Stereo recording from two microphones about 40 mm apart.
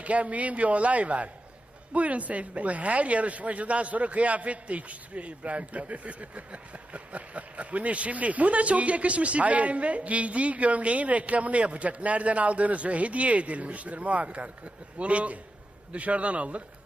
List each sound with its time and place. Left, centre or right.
0.0 s speech: right